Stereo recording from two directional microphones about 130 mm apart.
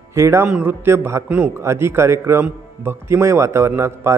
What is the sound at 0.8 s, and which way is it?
A man's voice, 20° right (ahead or behind).